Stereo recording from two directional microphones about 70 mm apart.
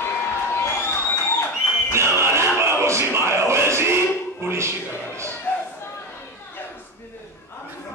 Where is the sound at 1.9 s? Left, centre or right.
Right.